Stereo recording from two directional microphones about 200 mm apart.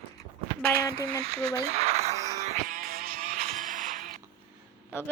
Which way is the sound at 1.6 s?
30° right (ahead or behind).